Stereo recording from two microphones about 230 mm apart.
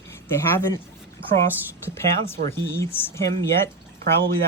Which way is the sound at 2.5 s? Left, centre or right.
Centre.